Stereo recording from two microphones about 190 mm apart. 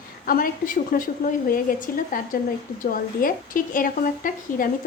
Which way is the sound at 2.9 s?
50° left (ahead or behind).